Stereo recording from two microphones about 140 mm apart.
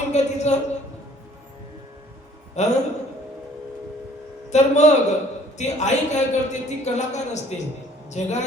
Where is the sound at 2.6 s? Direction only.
55° left (ahead or behind).